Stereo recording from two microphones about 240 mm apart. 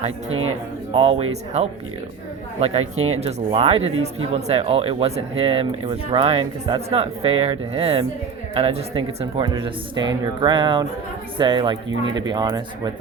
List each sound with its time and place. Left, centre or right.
0.9 s speech: right